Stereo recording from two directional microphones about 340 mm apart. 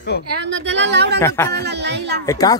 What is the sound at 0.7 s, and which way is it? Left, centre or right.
Speech, right.